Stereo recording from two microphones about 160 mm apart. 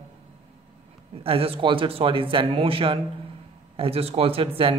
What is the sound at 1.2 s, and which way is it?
A man's voice, 35° right (ahead or behind).